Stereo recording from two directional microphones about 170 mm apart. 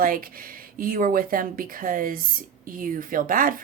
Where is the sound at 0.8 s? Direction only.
55° right (ahead or behind).